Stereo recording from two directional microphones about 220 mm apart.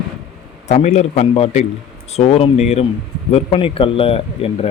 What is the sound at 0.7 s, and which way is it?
Speech, 30° left (ahead or behind).